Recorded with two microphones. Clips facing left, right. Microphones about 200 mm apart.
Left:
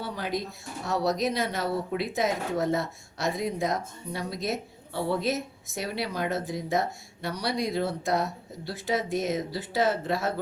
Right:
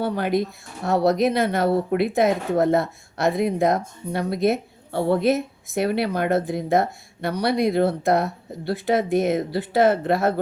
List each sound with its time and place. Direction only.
0.0 s speech: 60° right (ahead or behind)